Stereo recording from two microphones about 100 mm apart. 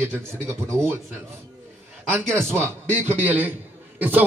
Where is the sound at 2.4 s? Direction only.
25° right (ahead or behind).